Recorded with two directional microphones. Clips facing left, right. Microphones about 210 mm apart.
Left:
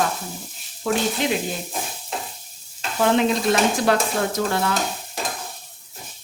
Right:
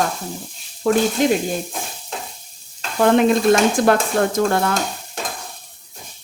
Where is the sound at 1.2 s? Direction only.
45° right (ahead or behind).